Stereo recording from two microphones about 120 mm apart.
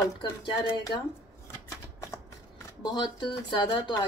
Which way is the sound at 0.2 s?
35° left (ahead or behind).